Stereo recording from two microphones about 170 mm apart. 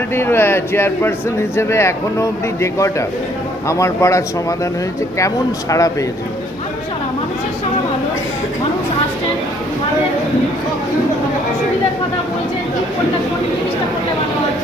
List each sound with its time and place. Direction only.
0.1 s a man's voice: 15° left (ahead or behind)